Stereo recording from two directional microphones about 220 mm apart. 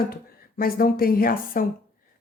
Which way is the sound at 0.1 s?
40° left (ahead or behind).